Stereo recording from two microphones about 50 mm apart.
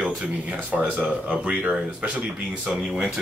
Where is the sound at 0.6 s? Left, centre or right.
Right.